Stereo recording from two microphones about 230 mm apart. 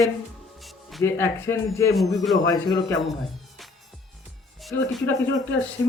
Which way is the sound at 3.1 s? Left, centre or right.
Centre.